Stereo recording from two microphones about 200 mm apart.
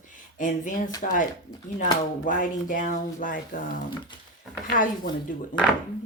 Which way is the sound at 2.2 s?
40° left (ahead or behind).